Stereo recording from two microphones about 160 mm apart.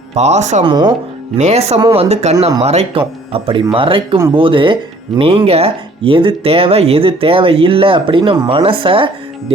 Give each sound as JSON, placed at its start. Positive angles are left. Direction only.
{"t": 0.1, "sound": "speech", "side_deg": -45}
{"t": 0.6, "sound": "speech", "side_deg": -25}
{"t": 1.4, "sound": "speech", "side_deg": -45}